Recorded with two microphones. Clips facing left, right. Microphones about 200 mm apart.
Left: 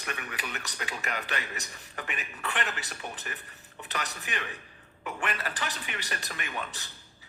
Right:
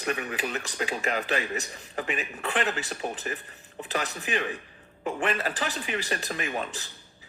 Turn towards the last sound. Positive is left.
turn(degrees=-35)  # may be behind; listen again after turning